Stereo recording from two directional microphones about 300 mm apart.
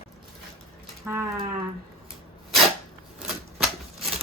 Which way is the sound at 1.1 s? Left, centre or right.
Centre.